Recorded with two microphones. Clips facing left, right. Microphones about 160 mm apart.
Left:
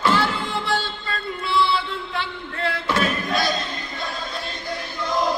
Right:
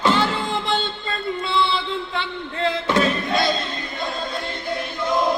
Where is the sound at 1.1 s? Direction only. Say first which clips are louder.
Right 2 dB; 25° right (ahead or behind).